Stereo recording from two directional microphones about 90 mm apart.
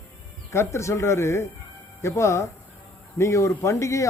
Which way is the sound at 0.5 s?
30° left (ahead or behind).